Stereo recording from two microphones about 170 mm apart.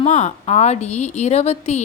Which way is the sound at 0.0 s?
45° left (ahead or behind).